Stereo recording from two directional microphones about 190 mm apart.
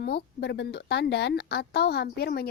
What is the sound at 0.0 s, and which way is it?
Speech, 60° left (ahead or behind).